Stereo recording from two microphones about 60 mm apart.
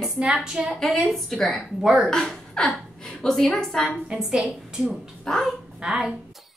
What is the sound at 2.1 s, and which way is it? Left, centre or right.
A woman's voice, centre.